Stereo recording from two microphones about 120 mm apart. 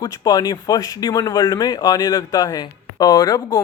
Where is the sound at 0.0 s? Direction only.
35° left (ahead or behind).